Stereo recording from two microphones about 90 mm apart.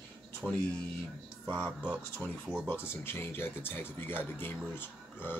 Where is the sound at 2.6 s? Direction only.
25° left (ahead or behind).